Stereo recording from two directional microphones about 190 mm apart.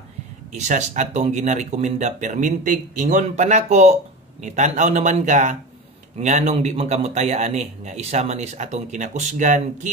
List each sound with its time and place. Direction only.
0.5 s a man's voice: 40° right (ahead or behind)